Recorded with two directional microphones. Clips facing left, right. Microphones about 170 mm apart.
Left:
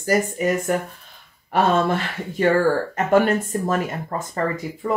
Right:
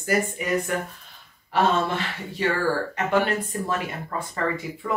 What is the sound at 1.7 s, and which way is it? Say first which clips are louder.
Speech: left 5 dB; 45° left (ahead or behind).